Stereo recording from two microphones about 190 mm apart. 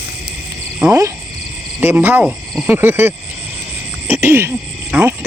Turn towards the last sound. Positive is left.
turn(degrees=-10)  # may be behind; listen again after turning